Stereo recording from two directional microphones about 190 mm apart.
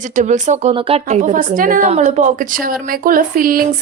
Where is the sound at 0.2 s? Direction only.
40° right (ahead or behind).